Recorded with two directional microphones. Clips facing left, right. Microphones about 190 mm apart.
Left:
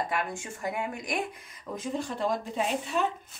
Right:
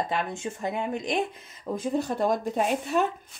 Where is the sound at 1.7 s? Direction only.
40° right (ahead or behind).